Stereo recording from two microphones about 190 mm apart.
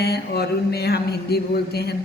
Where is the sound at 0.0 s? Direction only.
55° left (ahead or behind).